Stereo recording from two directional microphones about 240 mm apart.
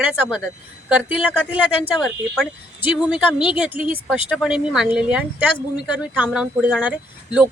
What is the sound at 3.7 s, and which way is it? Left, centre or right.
Speech, left.